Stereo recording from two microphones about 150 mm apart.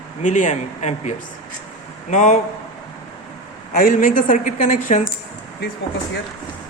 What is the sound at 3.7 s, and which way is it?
A woman's voice, 60° left (ahead or behind).